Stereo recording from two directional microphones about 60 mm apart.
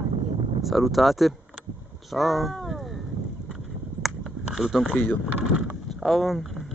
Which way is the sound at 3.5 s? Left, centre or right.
Centre.